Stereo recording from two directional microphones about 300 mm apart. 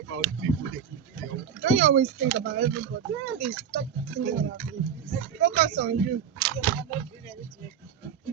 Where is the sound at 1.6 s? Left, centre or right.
Right.